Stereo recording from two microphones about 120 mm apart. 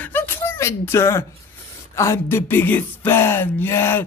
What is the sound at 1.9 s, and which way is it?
A man's voice, 25° left (ahead or behind).